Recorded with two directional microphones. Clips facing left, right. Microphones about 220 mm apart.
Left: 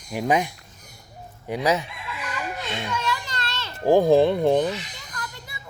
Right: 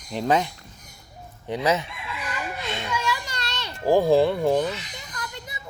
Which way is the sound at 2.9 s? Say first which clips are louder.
Even; 10° right (ahead or behind).